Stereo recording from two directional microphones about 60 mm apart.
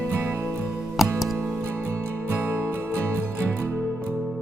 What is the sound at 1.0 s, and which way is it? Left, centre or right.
Music, centre.